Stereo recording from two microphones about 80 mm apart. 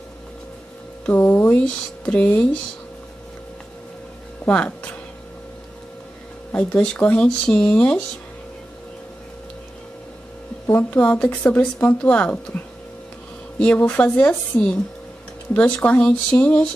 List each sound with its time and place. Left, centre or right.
1.0 s speech: centre
4.5 s speech: centre
6.5 s speech: centre
10.7 s speech: left
13.6 s speech: centre